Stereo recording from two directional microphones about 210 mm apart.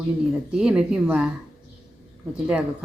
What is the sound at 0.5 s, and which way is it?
Speech, 5° right (ahead or behind).